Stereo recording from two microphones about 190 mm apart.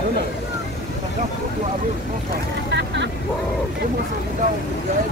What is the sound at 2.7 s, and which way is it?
Speech, 70° right (ahead or behind).